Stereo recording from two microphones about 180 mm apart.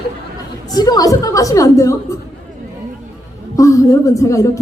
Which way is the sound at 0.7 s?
20° left (ahead or behind).